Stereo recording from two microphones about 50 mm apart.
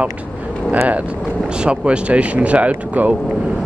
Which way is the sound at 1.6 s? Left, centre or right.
Right.